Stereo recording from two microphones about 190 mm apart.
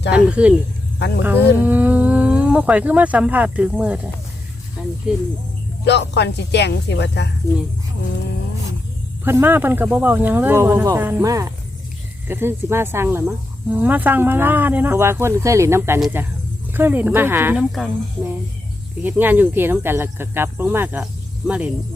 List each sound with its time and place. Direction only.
0.3 s speech: 5° right (ahead or behind)
0.9 s speech: 65° left (ahead or behind)
1.2 s speech: 10° right (ahead or behind)
5.8 s speech: 65° left (ahead or behind)
9.2 s speech: 10° right (ahead or behind)
19.0 s speech: 10° right (ahead or behind)